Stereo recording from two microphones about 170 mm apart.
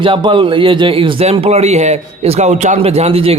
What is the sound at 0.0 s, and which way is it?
A man's voice, 30° right (ahead or behind).